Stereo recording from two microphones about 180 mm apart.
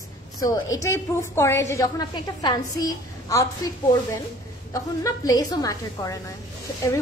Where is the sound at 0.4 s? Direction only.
20° left (ahead or behind).